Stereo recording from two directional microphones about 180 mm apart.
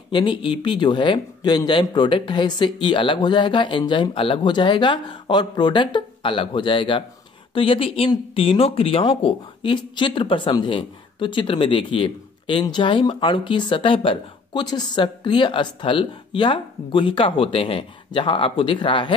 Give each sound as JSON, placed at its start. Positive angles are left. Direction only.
{"t": 0.1, "sound": "speech", "side_deg": 25}